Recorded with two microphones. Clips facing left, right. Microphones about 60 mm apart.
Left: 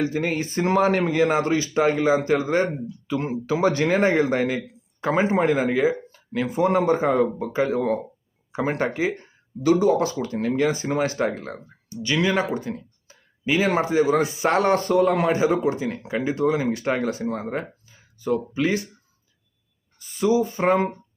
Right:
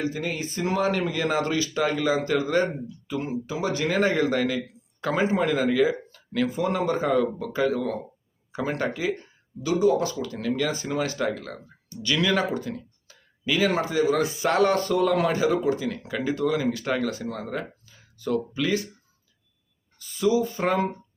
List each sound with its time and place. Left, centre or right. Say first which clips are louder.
0.0 s speech: left 5 dB; left
3.1 s speech: left 5 dB; left
5.9 s a sound: left 1 dB; centre
6.5 s speech: left 9 dB; left
12.0 s speech: left 2 dB; centre
20.1 s speech: left 2 dB; left